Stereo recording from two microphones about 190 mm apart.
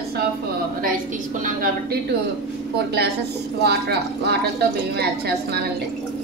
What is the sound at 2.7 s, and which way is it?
A woman's voice, 60° right (ahead or behind).